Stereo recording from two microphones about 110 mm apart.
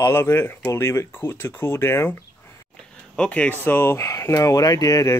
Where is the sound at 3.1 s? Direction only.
10° left (ahead or behind).